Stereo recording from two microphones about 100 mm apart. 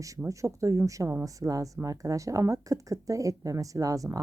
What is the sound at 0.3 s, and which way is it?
A woman's voice, 30° right (ahead or behind).